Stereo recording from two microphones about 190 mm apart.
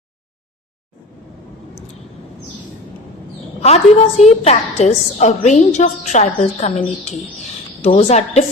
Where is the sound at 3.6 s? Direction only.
35° left (ahead or behind).